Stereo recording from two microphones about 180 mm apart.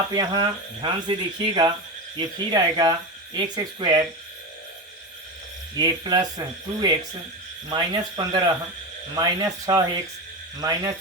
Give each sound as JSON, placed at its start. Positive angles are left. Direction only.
{"t": 0.1, "sound": "speech", "side_deg": -25}
{"t": 5.7, "sound": "speech", "side_deg": -20}